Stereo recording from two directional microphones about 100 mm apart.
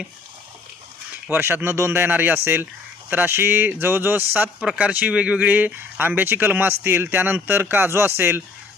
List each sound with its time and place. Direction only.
1.3 s speech: 20° right (ahead or behind)
4.6 s speech: 10° right (ahead or behind)